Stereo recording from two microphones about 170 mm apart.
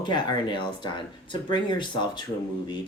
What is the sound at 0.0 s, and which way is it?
Speech, 25° left (ahead or behind).